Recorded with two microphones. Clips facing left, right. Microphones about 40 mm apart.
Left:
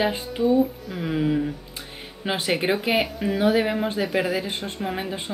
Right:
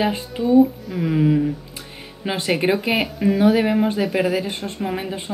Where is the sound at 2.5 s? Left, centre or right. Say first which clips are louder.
Right 3 dB; centre.